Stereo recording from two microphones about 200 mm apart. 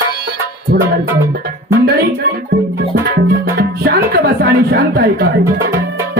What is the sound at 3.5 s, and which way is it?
Music, 50° right (ahead or behind).